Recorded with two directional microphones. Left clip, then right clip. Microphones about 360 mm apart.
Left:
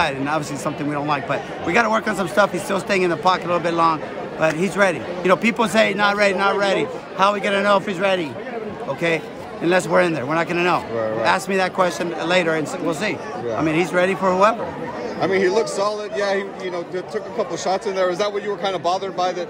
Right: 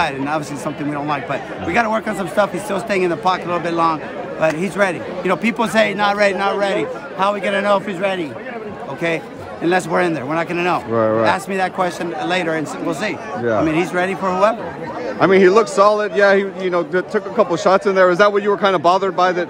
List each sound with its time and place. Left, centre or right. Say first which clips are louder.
0.0 s speech: right 1 dB; centre
15.1 s speech: right 7 dB; right